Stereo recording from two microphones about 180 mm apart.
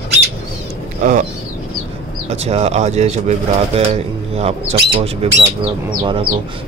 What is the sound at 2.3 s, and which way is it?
Speech, 35° right (ahead or behind).